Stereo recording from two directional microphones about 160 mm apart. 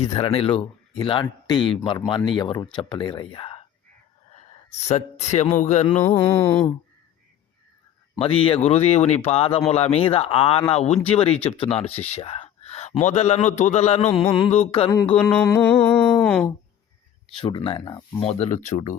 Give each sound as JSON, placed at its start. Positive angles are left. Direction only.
{"t": 0.0, "sound": "a man's voice", "side_deg": 40}
{"t": 4.4, "sound": "speech", "side_deg": 45}
{"t": 6.1, "sound": "speech", "side_deg": 20}
{"t": 8.2, "sound": "a man's voice", "side_deg": 35}
{"t": 14.3, "sound": "speech", "side_deg": 25}
{"t": 14.5, "sound": "a man's voice", "side_deg": 40}
{"t": 15.1, "sound": "speech", "side_deg": 10}
{"t": 17.4, "sound": "a man's voice", "side_deg": 30}